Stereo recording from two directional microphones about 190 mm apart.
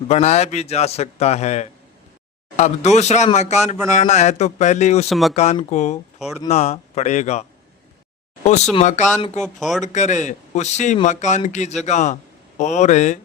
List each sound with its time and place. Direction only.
0.1 s a man's voice: 35° left (ahead or behind)
5.0 s speech: centre (ahead or behind)
5.7 s a man's voice: 35° left (ahead or behind)
6.1 s speech: centre (ahead or behind)
6.5 s a man's voice: 35° left (ahead or behind)
8.7 s a man's voice: 35° left (ahead or behind)
9.4 s speech: centre (ahead or behind)
9.8 s a man's voice: 40° left (ahead or behind)